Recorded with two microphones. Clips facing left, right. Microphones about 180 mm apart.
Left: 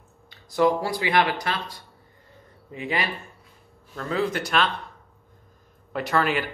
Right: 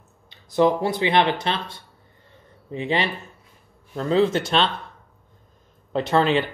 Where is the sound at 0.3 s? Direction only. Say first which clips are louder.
Right 2 dB; 20° right (ahead or behind).